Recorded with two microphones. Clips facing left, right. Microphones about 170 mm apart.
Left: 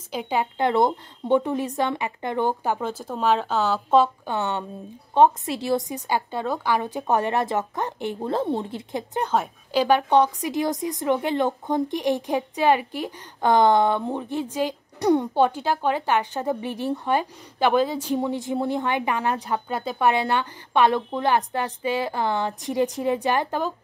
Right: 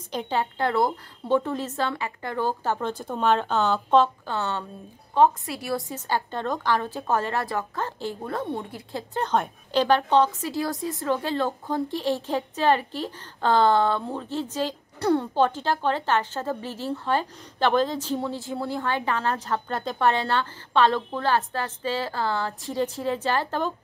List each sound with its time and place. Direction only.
0.1 s a woman's voice: 10° left (ahead or behind)
4.0 s a woman's voice: 15° left (ahead or behind)
9.3 s a woman's voice: 5° left (ahead or behind)